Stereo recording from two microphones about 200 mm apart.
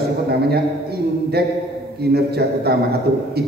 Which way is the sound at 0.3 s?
50° right (ahead or behind).